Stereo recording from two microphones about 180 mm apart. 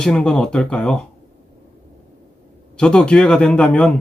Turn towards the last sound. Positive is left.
turn(degrees=5)  # may be behind; listen again after turning